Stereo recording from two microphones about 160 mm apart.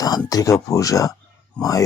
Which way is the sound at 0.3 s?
20° left (ahead or behind).